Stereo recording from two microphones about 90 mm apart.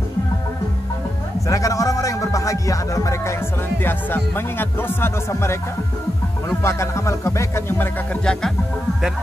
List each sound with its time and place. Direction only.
1.5 s speech: 40° left (ahead or behind)
3.8 s speech: 25° left (ahead or behind)
6.6 s music: 30° left (ahead or behind)
8.1 s music: 10° left (ahead or behind)